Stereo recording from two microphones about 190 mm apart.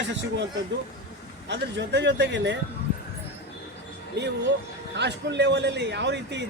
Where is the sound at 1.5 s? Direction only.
65° right (ahead or behind).